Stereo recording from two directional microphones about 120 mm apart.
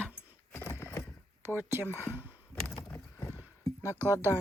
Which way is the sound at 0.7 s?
20° left (ahead or behind).